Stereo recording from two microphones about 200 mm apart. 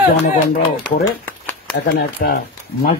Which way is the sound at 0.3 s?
50° left (ahead or behind).